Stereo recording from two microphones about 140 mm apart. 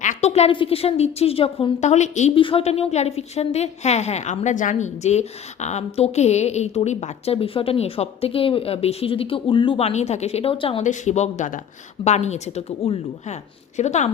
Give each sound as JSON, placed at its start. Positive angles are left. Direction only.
{"t": 0.0, "sound": "a woman's voice", "side_deg": 55}
{"t": 1.8, "sound": "speech", "side_deg": 55}
{"t": 2.3, "sound": "a woman's voice", "side_deg": 40}
{"t": 10.8, "sound": "a woman's voice", "side_deg": 60}